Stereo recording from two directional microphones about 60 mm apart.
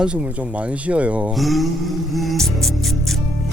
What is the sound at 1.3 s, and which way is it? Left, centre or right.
Speech, centre.